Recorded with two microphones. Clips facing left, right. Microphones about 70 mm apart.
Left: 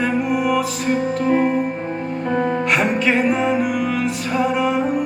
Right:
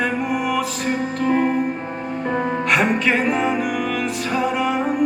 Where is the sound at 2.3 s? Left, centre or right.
Centre.